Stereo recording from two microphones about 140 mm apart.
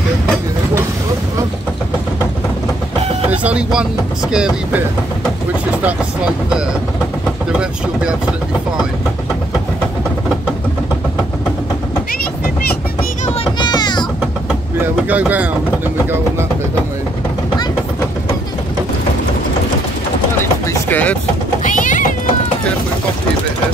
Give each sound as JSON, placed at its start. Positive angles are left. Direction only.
{"t": 3.3, "sound": "vehicle", "side_deg": -10}
{"t": 4.3, "sound": "speech", "side_deg": -5}
{"t": 13.6, "sound": "music", "side_deg": 30}
{"t": 15.0, "sound": "speech", "side_deg": -10}
{"t": 20.9, "sound": "vehicle", "side_deg": 10}
{"t": 21.6, "sound": "cat", "side_deg": 65}